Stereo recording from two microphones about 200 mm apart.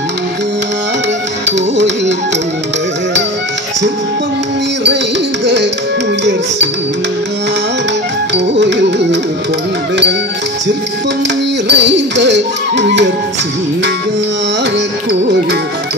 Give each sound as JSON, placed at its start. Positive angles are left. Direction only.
{"t": 5.4, "sound": "music", "side_deg": -60}
{"t": 8.5, "sound": "music", "side_deg": -60}
{"t": 11.6, "sound": "music", "side_deg": -60}